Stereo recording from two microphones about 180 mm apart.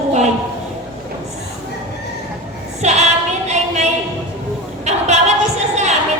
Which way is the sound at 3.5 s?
40° right (ahead or behind).